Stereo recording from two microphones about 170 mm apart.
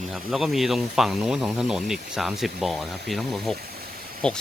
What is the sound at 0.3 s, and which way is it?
Speech, centre (ahead or behind).